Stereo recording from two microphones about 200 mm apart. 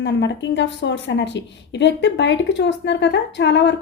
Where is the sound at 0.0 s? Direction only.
60° left (ahead or behind).